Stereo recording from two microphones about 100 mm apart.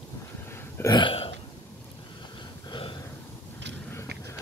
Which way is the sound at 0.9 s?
55° left (ahead or behind).